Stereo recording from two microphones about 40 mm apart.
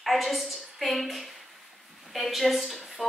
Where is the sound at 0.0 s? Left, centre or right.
Centre.